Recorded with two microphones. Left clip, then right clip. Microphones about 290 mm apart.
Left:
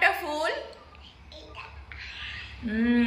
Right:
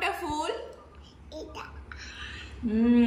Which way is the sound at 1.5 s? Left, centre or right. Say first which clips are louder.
Even; right.